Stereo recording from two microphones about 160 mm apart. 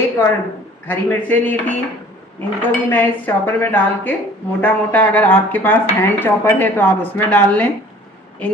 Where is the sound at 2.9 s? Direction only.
10° left (ahead or behind).